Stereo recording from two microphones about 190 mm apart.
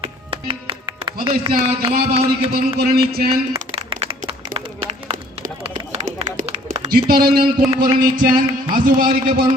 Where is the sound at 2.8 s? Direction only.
55° right (ahead or behind).